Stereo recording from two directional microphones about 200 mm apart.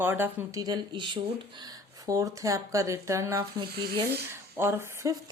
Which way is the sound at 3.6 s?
55° right (ahead or behind).